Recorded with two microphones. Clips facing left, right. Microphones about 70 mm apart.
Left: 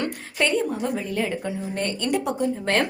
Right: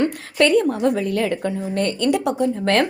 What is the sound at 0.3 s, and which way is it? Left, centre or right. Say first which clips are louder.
Speech: right 7 dB; right.